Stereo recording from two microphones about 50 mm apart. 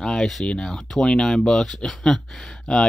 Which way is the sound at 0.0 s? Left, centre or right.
Centre.